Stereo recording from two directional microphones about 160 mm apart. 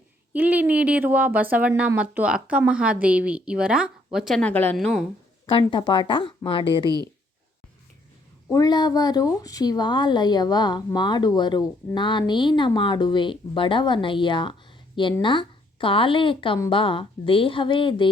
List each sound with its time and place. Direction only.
0.3 s a woman's voice: 10° right (ahead or behind)
5.5 s a woman's voice: 30° left (ahead or behind)
8.4 s a woman's voice: 25° left (ahead or behind)